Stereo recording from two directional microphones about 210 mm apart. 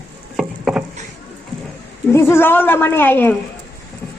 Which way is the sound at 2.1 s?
10° left (ahead or behind).